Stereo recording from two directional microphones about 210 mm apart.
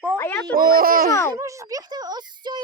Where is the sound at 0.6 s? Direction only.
45° right (ahead or behind).